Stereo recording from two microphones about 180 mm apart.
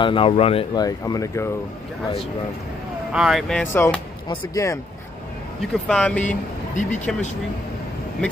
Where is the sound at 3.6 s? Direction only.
10° left (ahead or behind).